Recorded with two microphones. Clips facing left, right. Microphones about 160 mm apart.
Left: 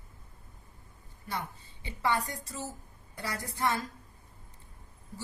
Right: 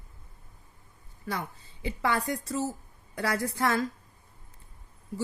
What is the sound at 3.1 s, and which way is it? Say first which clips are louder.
Speech: right 9 dB; 90° right.